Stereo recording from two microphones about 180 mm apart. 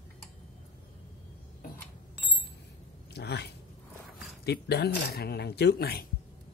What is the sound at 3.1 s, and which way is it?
Cat, 65° left (ahead or behind).